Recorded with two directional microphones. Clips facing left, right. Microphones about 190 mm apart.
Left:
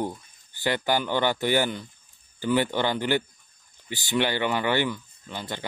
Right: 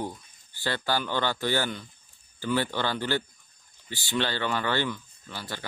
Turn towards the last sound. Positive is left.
turn(degrees=20)  # may be behind; listen again after turning